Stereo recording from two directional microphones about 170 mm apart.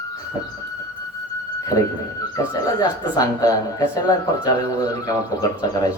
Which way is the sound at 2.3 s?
20° left (ahead or behind).